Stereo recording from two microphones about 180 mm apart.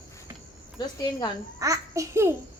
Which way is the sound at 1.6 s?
15° right (ahead or behind).